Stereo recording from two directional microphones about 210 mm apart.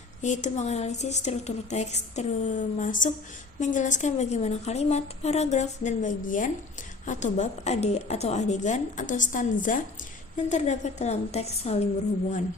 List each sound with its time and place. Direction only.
0.2 s speech: 35° left (ahead or behind)